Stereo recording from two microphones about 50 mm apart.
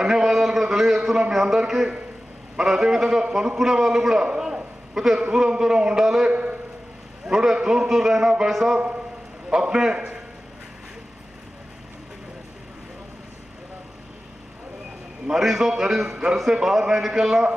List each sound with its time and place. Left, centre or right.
0.0 s a sound: centre
1.3 s a man's voice: centre
8.7 s a man's voice: right
15.2 s a man's voice: centre